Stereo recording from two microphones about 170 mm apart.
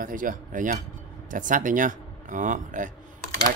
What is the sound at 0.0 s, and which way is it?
Speech, 50° right (ahead or behind).